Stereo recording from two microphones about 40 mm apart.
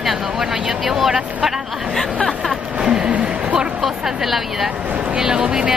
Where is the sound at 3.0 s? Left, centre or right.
Right.